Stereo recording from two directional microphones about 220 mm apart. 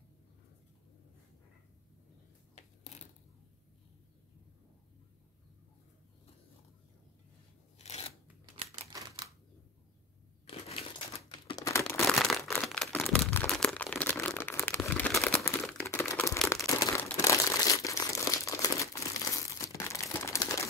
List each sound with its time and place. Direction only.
2.5 s a sound: 30° left (ahead or behind)
7.8 s scissors: 30° left (ahead or behind)
8.9 s typewriter: 15° right (ahead or behind)
10.4 s crushing: 25° left (ahead or behind)
11.2 s crumpling: 20° left (ahead or behind)